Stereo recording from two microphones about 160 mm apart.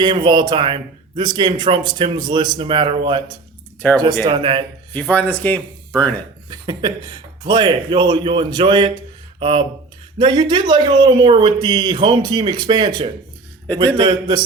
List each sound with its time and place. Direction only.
0.0 s speech: 30° right (ahead or behind)
3.9 s speech: 25° right (ahead or behind)
4.9 s speech: 10° left (ahead or behind)
6.5 s speech: 25° right (ahead or behind)